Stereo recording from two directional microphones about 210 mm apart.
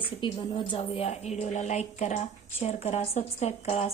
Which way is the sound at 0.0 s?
25° left (ahead or behind).